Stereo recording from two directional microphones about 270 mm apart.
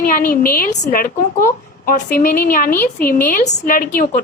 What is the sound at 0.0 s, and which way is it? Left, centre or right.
A woman's voice, left.